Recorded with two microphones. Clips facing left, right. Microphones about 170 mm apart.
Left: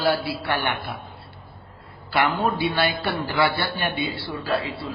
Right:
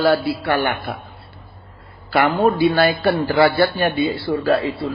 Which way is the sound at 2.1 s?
45° right (ahead or behind).